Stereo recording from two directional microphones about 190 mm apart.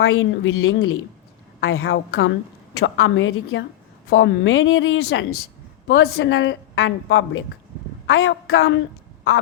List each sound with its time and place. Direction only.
0.0 s a woman's voice: 90° left
2.0 s a woman's voice: 70° left (ahead or behind)
2.8 s a woman's voice: 90° left
4.1 s a woman's voice: 70° left (ahead or behind)